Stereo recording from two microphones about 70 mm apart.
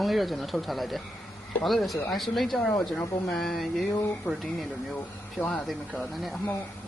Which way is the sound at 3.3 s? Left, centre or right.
Centre.